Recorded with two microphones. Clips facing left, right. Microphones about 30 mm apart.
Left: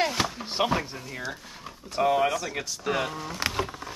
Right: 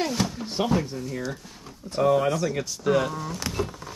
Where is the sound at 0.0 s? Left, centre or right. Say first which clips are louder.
Even; left.